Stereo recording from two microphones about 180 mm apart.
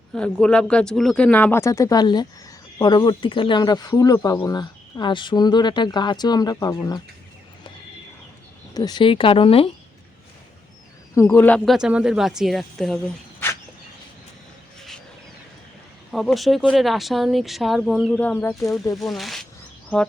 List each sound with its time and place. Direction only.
0.1 s speech: 5° left (ahead or behind); by 7.0 s 20° left (ahead or behind)
8.7 s speech: 20° left (ahead or behind)
11.1 s speech: 15° left (ahead or behind)
16.1 s speech: centre (ahead or behind)